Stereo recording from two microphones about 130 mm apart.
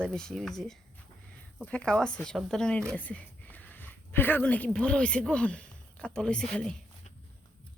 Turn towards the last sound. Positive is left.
turn(degrees=5)  # may be behind; listen again after turning